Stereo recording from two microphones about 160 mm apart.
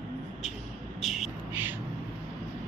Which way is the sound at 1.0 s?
Centre (ahead or behind).